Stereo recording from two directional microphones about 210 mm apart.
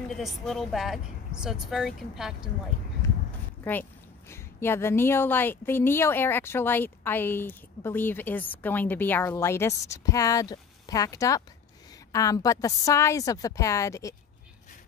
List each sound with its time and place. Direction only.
0.1 s speech: centre (ahead or behind)
4.3 s a woman's voice: 10° left (ahead or behind)